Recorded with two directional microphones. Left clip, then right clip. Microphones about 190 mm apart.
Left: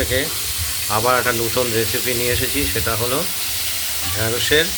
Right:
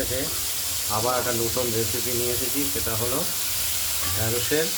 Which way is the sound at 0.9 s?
25° left (ahead or behind).